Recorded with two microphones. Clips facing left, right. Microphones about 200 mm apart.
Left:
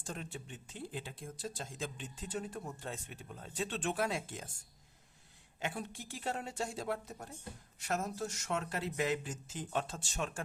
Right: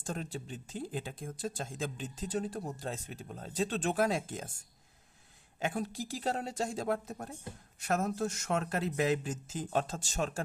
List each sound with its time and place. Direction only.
0.0 s speech: 40° right (ahead or behind)
5.5 s a woman's voice: 45° right (ahead or behind)